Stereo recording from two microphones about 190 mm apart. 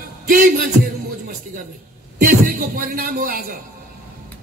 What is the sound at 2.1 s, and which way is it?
A man's voice, 50° right (ahead or behind).